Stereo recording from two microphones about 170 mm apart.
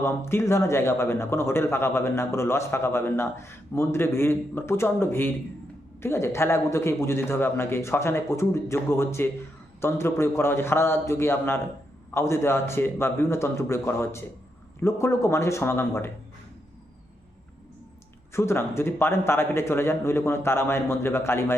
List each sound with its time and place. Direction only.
0.0 s a man's voice: 15° left (ahead or behind)
18.3 s a man's voice: 15° left (ahead or behind)